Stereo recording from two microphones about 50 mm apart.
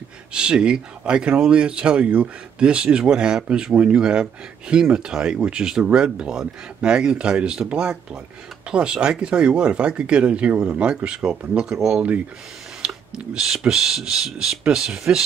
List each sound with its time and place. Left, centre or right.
0.3 s speech: centre
12.8 s speech: centre